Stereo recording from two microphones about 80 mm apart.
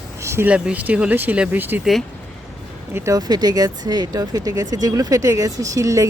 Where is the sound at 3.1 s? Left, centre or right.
Right.